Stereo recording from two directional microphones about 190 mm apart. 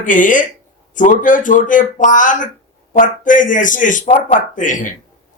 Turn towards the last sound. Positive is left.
turn(degrees=45)  # may be behind; listen again after turning